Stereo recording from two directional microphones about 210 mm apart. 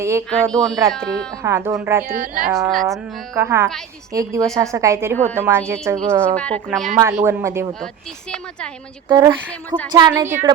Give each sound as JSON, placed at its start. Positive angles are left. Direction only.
{"t": 0.0, "sound": "a woman's voice", "side_deg": -15}
{"t": 0.5, "sound": "speech", "side_deg": 0}
{"t": 1.4, "sound": "a woman's voice", "side_deg": -15}
{"t": 2.0, "sound": "speech", "side_deg": -40}
{"t": 2.5, "sound": "speech", "side_deg": 0}
{"t": 3.3, "sound": "a woman's voice", "side_deg": -15}
{"t": 6.3, "sound": "a woman's voice", "side_deg": 5}
{"t": 9.0, "sound": "a woman's voice", "side_deg": -15}
{"t": 9.5, "sound": "a sound", "side_deg": 5}
{"t": 9.9, "sound": "a woman's voice", "side_deg": -20}